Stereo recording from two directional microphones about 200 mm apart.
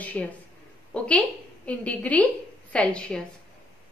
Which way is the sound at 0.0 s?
5° left (ahead or behind).